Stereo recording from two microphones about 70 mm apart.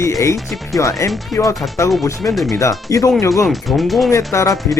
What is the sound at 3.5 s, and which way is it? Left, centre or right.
Speech, centre.